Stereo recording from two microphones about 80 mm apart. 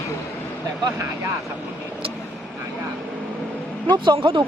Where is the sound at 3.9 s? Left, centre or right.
Right.